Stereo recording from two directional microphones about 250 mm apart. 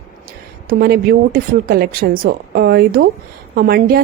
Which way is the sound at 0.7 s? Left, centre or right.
Right.